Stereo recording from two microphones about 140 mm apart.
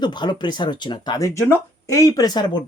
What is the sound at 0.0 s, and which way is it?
Speech, 30° left (ahead or behind).